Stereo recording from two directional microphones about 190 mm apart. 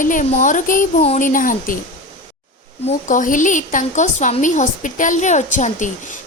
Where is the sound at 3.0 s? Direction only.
45° left (ahead or behind).